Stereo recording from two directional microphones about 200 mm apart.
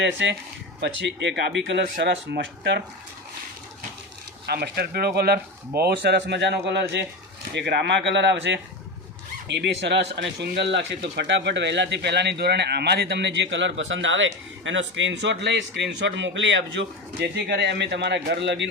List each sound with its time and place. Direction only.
0.0 s speech: 60° right (ahead or behind)
4.4 s speech: 50° right (ahead or behind)